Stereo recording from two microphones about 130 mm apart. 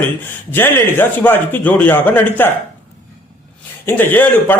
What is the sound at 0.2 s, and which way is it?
A man's voice, 15° left (ahead or behind).